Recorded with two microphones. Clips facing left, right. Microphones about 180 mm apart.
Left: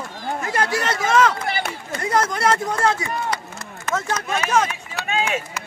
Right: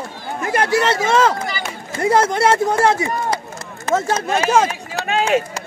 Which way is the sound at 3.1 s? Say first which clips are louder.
Right 4 dB; 35° right (ahead or behind).